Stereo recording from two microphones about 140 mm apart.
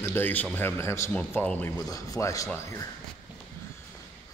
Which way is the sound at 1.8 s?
25° left (ahead or behind).